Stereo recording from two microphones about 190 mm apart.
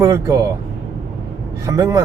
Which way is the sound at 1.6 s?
15° right (ahead or behind).